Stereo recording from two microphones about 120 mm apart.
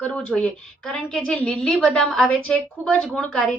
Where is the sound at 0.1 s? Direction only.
10° left (ahead or behind).